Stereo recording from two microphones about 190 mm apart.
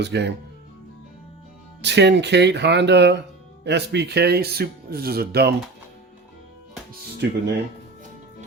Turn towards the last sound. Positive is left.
turn(degrees=-65)  # may be behind; listen again after turning